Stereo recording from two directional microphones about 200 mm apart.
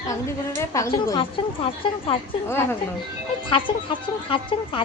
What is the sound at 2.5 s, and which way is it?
Speech, 10° left (ahead or behind).